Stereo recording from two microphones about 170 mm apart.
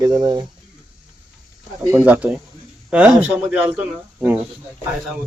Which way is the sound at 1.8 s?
10° right (ahead or behind).